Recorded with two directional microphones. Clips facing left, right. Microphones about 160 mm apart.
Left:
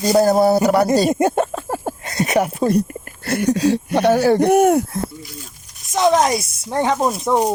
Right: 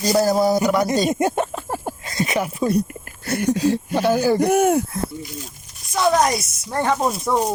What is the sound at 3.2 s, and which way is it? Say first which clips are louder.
Speech: left 2 dB; 70° left (ahead or behind).